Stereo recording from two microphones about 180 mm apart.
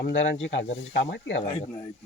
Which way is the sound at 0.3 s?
90° left.